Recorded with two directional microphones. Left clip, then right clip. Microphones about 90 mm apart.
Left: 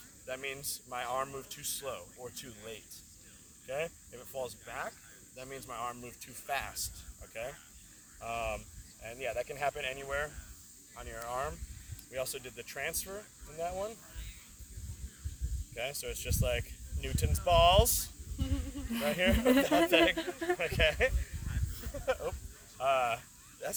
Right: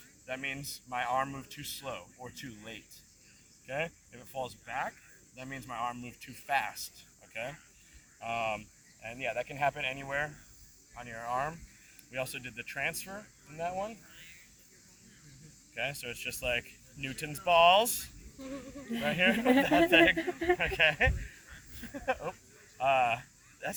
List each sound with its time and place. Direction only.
0.3 s speech: 35° left (ahead or behind)
3.7 s speech: 40° left (ahead or behind)
12.1 s speech: 35° left (ahead or behind)
15.7 s speech: 35° left (ahead or behind)
18.9 s speech: 20° left (ahead or behind)
19.1 s speech: 35° left (ahead or behind)
19.4 s speech: 25° left (ahead or behind)
19.9 s speech: 35° left (ahead or behind)
21.8 s a sound: 40° left (ahead or behind)